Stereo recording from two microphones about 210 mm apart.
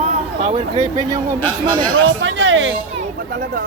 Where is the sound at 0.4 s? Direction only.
35° right (ahead or behind).